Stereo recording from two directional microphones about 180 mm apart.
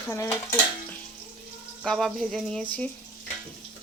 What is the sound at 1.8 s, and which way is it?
Speech, centre (ahead or behind).